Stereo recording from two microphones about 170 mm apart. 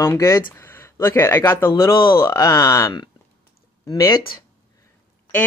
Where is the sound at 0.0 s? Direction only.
15° left (ahead or behind).